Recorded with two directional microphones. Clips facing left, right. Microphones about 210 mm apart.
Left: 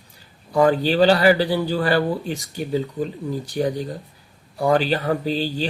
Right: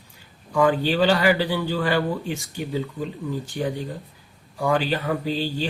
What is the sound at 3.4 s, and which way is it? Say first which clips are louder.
Speech: left 4 dB; 40° left (ahead or behind).